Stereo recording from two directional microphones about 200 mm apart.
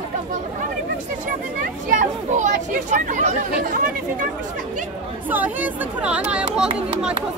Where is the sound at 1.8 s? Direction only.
35° right (ahead or behind).